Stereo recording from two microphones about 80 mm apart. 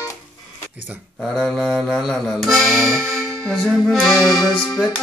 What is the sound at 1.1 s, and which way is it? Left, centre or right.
Music, centre.